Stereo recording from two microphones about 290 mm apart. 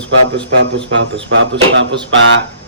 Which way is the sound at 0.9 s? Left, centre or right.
Right.